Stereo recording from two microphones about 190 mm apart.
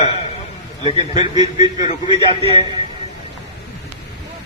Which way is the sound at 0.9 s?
25° right (ahead or behind).